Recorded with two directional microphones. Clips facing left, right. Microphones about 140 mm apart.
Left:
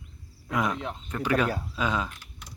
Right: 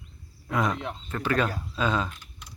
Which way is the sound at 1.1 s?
10° left (ahead or behind).